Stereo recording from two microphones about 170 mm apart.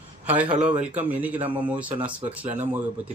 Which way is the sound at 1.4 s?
30° right (ahead or behind).